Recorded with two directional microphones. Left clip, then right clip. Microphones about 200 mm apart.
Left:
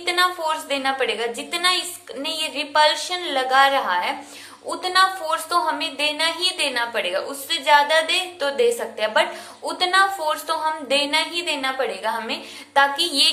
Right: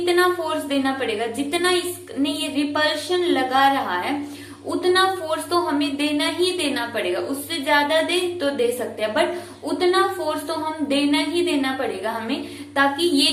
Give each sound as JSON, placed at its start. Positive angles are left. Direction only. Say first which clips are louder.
{"t": 0.0, "sound": "a woman's voice", "louder": "right 1 dB", "side_deg": 30}